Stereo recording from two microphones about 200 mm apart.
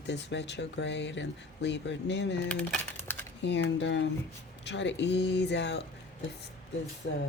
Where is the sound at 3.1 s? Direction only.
10° left (ahead or behind).